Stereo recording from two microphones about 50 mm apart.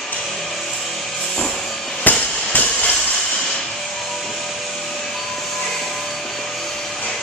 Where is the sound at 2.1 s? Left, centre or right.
Left.